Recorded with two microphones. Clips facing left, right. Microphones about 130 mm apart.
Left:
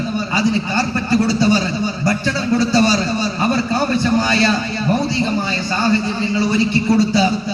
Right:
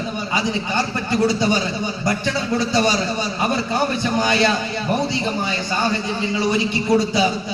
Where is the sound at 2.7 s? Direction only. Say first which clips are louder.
Left 3 dB; 20° right (ahead or behind).